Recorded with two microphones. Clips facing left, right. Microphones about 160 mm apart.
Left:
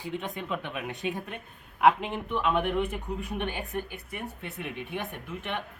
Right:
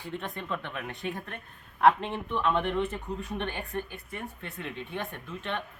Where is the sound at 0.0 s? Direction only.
10° left (ahead or behind).